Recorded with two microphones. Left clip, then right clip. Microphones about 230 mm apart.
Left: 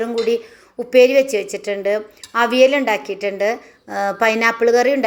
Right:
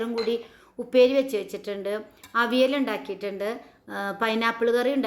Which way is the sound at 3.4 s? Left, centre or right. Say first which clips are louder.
Left 11 dB; centre.